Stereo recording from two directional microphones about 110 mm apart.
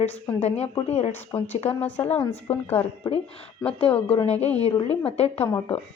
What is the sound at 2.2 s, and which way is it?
A woman's voice, 15° left (ahead or behind).